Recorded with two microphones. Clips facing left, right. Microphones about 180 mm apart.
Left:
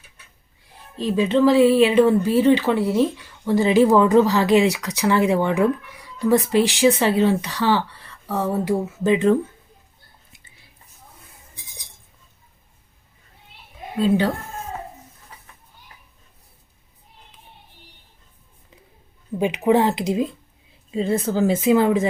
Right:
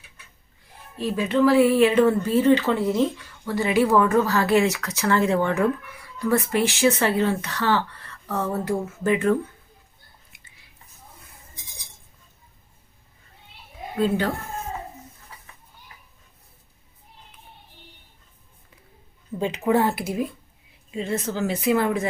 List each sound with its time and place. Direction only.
1.1 s speech: 20° left (ahead or behind)
3.4 s speech: 25° left (ahead or behind)
14.0 s speech: 15° left (ahead or behind)
19.4 s a woman's voice: 15° left (ahead or behind)
20.9 s a woman's voice: 30° left (ahead or behind)